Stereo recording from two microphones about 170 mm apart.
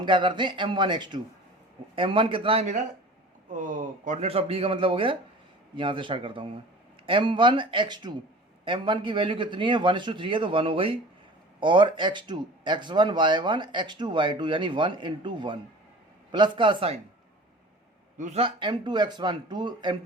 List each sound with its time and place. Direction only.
0.0 s speech: 25° right (ahead or behind)
3.5 s speech: 50° right (ahead or behind); by 16.9 s 30° right (ahead or behind)
18.2 s speech: 40° right (ahead or behind)